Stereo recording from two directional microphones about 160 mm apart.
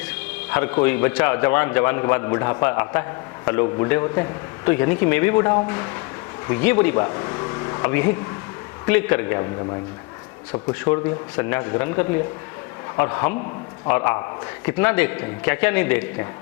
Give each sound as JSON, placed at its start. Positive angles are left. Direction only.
{"t": 0.5, "sound": "a man's voice", "side_deg": 10}
{"t": 10.5, "sound": "a man's voice", "side_deg": 25}